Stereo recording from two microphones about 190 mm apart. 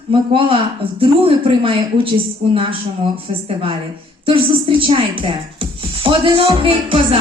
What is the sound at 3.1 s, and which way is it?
Speech, 30° right (ahead or behind).